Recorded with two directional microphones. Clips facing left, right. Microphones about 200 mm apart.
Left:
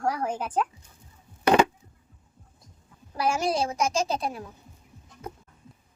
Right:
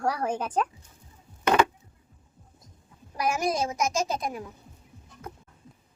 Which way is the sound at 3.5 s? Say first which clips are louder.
Left 1 dB; 30° left (ahead or behind).